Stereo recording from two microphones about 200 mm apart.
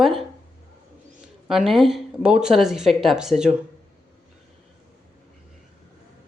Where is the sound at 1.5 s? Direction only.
Centre (ahead or behind).